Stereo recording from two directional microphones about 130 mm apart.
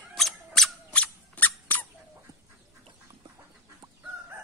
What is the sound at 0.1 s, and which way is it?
Squeak, centre (ahead or behind).